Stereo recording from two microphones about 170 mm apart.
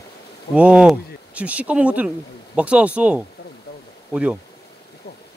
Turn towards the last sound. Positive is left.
turn(degrees=-10)  # may be behind; listen again after turning